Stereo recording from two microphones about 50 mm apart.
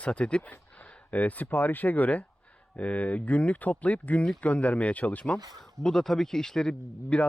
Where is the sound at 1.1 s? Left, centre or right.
Left.